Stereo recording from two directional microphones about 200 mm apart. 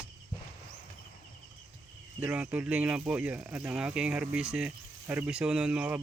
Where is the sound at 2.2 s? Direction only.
5° right (ahead or behind).